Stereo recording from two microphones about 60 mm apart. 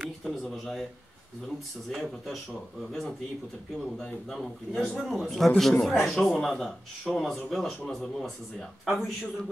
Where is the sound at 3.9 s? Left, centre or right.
Centre.